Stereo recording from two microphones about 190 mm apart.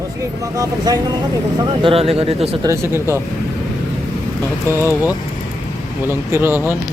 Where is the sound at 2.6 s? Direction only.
15° right (ahead or behind).